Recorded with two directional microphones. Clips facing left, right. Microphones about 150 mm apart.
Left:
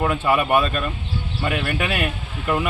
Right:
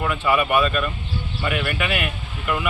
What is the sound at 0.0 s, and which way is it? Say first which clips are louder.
Speech: left 1 dB; 35° left (ahead or behind).